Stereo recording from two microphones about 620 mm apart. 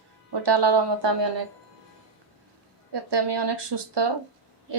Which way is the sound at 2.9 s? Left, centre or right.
Right.